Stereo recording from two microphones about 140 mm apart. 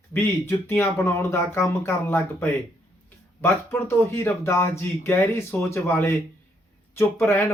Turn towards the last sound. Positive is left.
turn(degrees=15)  # may be behind; listen again after turning